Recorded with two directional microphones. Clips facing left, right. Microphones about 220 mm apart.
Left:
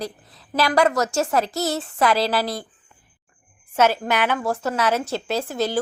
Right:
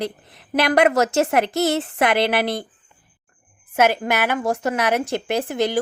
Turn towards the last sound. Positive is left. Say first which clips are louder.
# right 2 dB
turn(degrees=-15)  # may be behind; listen again after turning